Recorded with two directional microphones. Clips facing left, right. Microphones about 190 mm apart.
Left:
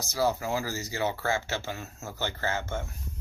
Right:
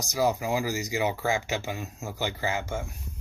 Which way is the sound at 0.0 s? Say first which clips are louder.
Right 2 dB; 15° right (ahead or behind).